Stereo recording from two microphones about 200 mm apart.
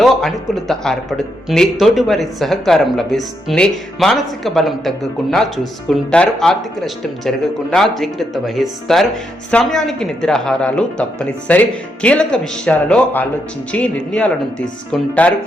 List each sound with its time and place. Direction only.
0.0 s speech: centre (ahead or behind)